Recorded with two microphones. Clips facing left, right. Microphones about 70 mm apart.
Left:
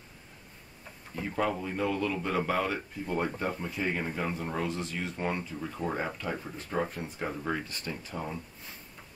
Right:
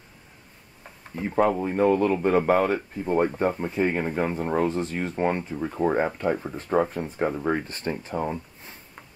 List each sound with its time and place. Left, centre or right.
1.3 s speech: right